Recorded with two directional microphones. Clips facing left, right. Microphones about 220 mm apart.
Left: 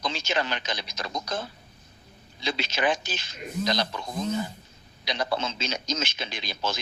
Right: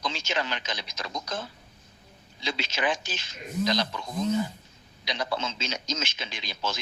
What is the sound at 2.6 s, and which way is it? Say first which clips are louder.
A man's voice: left 3 dB; 35° left (ahead or behind).